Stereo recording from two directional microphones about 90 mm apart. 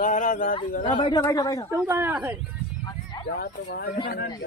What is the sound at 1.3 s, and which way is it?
Speech, 40° left (ahead or behind).